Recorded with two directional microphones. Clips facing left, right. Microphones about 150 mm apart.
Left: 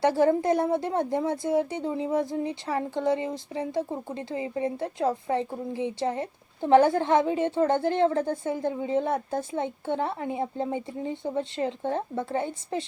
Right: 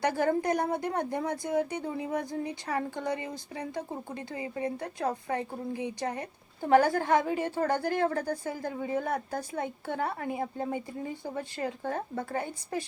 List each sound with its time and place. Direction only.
0.0 s speech: 25° left (ahead or behind)